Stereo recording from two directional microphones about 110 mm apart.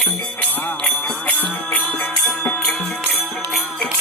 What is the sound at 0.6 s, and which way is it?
Music, 15° left (ahead or behind).